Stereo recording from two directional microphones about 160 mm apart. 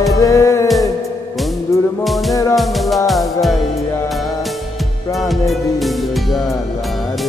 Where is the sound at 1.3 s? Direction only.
Centre (ahead or behind).